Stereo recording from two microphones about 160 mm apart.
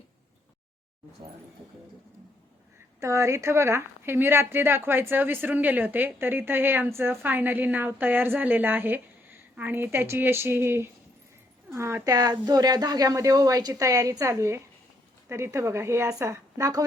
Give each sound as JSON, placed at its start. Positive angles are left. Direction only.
{"t": 3.0, "sound": "speech", "side_deg": -20}